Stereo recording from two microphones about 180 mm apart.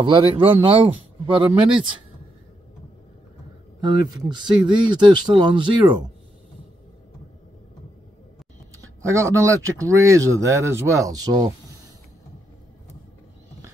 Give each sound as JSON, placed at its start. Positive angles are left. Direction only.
{"t": 0.0, "sound": "speech", "side_deg": -30}
{"t": 3.8, "sound": "speech", "side_deg": -25}
{"t": 9.0, "sound": "speech", "side_deg": -15}